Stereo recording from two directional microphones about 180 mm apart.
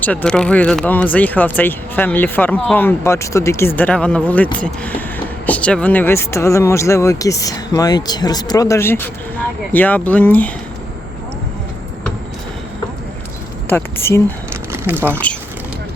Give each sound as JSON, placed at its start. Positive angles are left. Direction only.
{"t": 0.0, "sound": "speech", "side_deg": 10}
{"t": 13.7, "sound": "speech", "side_deg": 15}
{"t": 14.7, "sound": "a sound", "side_deg": -10}
{"t": 15.1, "sound": "speech", "side_deg": 10}